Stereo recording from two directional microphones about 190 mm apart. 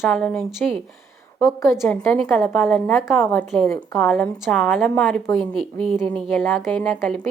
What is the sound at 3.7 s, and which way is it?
A woman's voice, 15° left (ahead or behind).